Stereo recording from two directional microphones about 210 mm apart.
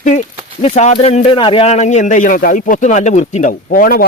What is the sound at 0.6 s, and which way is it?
A man's voice, 35° left (ahead or behind).